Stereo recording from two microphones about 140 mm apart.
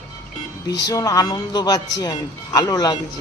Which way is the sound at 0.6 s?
25° left (ahead or behind).